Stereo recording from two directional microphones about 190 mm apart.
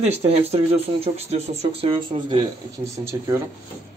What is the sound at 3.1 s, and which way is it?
Speech, 15° right (ahead or behind).